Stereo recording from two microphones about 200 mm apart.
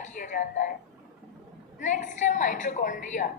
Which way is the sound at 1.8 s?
40° left (ahead or behind).